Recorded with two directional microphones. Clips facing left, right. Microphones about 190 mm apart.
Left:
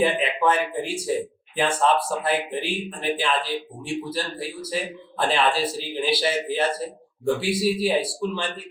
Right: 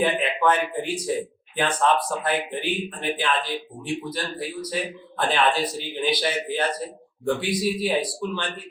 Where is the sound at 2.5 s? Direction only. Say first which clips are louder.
Even; 30° left (ahead or behind).